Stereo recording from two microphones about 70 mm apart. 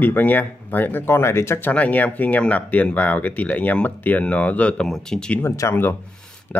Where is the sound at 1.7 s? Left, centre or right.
Left.